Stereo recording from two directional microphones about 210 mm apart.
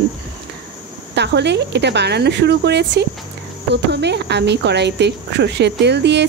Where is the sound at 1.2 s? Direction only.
55° right (ahead or behind).